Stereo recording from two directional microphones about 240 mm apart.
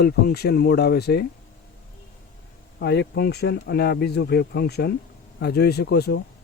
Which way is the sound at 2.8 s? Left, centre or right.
Left.